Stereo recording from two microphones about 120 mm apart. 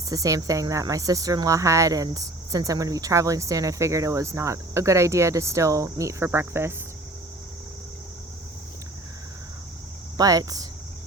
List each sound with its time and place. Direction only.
0.1 s speech: 30° right (ahead or behind)
10.2 s speech: 30° right (ahead or behind)